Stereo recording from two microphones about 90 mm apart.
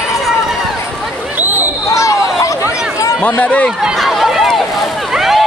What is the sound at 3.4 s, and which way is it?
Speech, 15° left (ahead or behind).